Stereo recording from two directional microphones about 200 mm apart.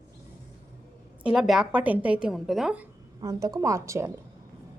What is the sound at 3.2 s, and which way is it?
Speech, 20° right (ahead or behind).